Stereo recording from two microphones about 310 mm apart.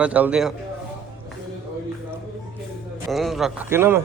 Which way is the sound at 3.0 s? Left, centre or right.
Centre.